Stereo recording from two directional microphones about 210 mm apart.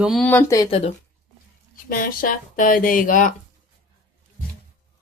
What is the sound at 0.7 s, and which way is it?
Speech, 30° left (ahead or behind).